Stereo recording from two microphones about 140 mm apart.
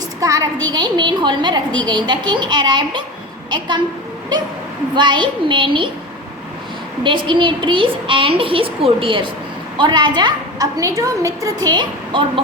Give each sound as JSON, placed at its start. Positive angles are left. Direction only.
{"t": 0.2, "sound": "a woman's voice", "side_deg": -25}
{"t": 4.9, "sound": "a woman's voice", "side_deg": -35}
{"t": 7.0, "sound": "a woman's voice", "side_deg": -35}